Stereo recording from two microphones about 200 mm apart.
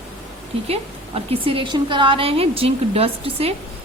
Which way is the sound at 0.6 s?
30° right (ahead or behind).